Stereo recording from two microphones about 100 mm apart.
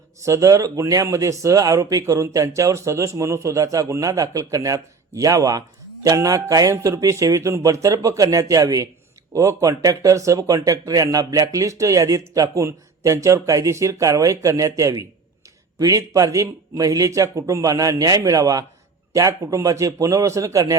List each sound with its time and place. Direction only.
0.3 s speech: 30° right (ahead or behind)